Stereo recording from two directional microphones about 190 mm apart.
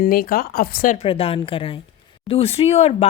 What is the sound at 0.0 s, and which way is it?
Speech, 50° left (ahead or behind).